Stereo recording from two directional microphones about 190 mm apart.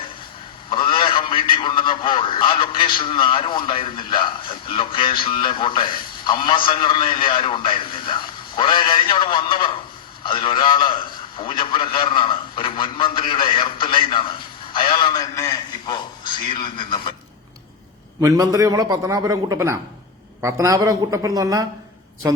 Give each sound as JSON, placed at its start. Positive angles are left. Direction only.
{"t": 0.7, "sound": "a man's voice", "side_deg": 25}
{"t": 14.7, "sound": "a sound", "side_deg": 25}
{"t": 18.2, "sound": "a man's voice", "side_deg": -15}